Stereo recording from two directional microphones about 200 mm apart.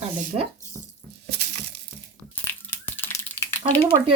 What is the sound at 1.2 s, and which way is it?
Crushing, 55° right (ahead or behind).